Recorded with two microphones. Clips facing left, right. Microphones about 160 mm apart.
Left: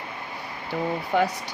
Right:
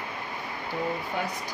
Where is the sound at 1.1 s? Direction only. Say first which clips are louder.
Left 12 dB; 80° left.